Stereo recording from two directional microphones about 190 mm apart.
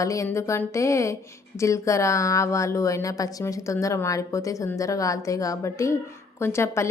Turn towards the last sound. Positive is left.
turn(degrees=15)  # may be behind; listen again after turning